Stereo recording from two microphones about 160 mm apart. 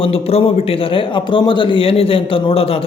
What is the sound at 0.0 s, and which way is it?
A man's voice, 35° left (ahead or behind).